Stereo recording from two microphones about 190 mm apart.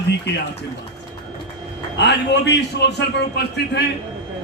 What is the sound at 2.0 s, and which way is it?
A man's voice, 65° left (ahead or behind).